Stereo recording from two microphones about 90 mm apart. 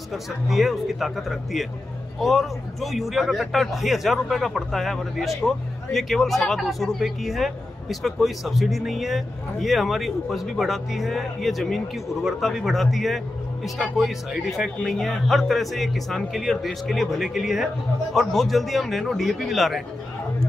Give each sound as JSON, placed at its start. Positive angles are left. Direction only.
{"t": 0.1, "sound": "a man's voice", "side_deg": 0}